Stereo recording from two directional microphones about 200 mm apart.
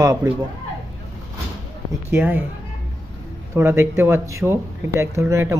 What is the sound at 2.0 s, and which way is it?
Speech, 10° right (ahead or behind).